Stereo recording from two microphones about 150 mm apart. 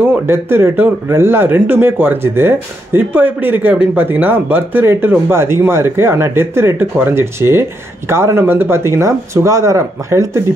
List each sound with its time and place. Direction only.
0.0 s speech: 15° right (ahead or behind)